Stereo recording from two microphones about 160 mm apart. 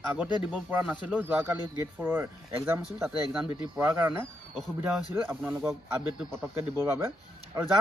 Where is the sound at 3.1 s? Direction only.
25° left (ahead or behind).